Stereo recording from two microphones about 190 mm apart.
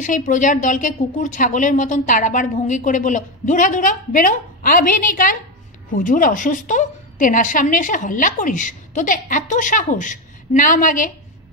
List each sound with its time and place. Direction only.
0.0 s a woman's voice: 40° left (ahead or behind)